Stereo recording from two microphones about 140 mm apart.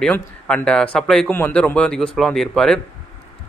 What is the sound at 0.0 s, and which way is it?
A man's voice, 5° left (ahead or behind).